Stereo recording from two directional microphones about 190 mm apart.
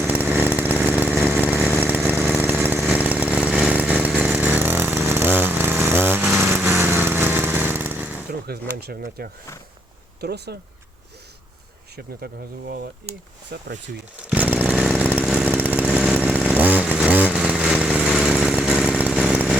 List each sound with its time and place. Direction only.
0.0 s chainsaw: 10° right (ahead or behind)
6.4 s lawn mower: 15° right (ahead or behind)
8.4 s a sound: 55° right (ahead or behind)
10.2 s speech: 60° right (ahead or behind)
12.2 s speech: 55° right (ahead or behind)
14.3 s chainsaw: 10° right (ahead or behind)